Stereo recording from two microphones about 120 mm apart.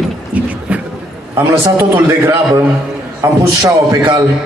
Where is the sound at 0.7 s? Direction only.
10° right (ahead or behind).